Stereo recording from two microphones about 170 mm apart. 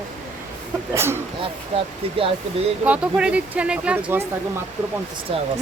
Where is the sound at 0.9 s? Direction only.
15° right (ahead or behind).